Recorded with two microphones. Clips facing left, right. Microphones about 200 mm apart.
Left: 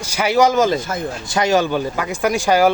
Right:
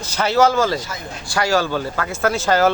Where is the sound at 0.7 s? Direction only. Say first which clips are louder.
Left 5 dB; 50° left (ahead or behind).